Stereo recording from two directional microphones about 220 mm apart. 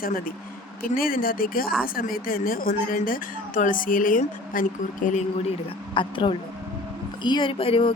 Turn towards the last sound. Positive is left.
turn(degrees=25)  # may be behind; listen again after turning